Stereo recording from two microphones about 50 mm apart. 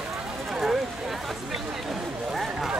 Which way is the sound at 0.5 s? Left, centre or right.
Centre.